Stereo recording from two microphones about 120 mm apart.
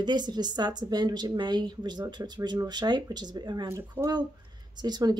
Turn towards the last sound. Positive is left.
turn(degrees=-35)  # may be behind; listen again after turning